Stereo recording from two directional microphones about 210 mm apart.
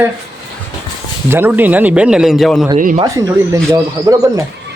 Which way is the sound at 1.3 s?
10° right (ahead or behind).